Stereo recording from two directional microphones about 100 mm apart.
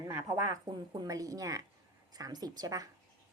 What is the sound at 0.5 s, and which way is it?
A woman's voice, 40° right (ahead or behind).